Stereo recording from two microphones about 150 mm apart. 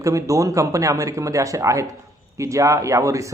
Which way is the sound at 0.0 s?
20° right (ahead or behind).